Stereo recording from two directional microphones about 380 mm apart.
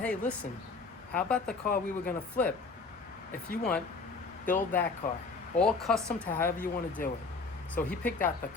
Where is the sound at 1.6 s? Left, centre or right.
Left.